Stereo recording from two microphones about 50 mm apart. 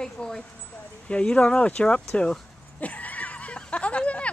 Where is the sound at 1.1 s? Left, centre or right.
Left.